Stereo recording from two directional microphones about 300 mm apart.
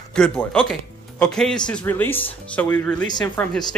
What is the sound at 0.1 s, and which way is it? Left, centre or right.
Speech, centre.